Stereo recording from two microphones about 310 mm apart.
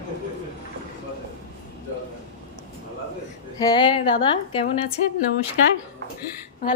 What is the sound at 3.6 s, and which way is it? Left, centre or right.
A woman's voice, centre.